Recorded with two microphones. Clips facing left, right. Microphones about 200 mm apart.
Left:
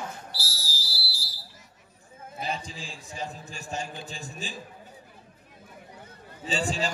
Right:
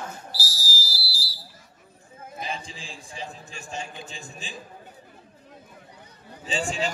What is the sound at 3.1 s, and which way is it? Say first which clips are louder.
Speech: left 2 dB; 40° left (ahead or behind).